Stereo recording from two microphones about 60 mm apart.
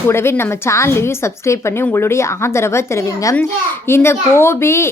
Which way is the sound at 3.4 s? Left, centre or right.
Left.